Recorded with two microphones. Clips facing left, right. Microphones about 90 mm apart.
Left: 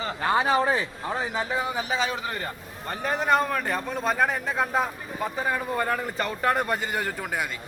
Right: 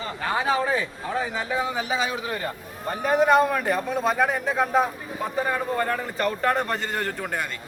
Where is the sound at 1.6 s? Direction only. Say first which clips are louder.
Right 1 dB; centre (ahead or behind).